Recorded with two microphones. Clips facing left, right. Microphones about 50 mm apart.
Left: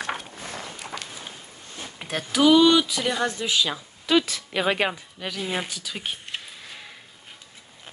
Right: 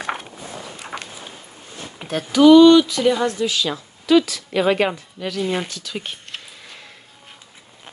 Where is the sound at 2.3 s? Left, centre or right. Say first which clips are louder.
Right 8 dB; centre.